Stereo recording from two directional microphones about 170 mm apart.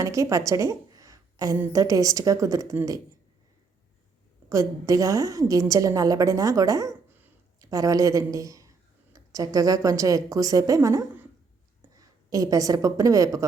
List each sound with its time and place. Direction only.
0.0 s a woman's voice: 20° right (ahead or behind)
4.4 s a woman's voice: 20° right (ahead or behind)